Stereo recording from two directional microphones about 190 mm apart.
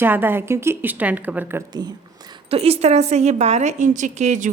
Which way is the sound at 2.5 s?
30° right (ahead or behind).